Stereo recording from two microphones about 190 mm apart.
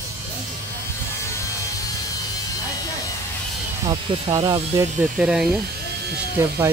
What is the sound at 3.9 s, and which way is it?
Speech, 30° right (ahead or behind).